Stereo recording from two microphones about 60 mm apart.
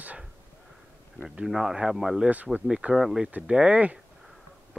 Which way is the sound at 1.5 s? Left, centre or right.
Centre.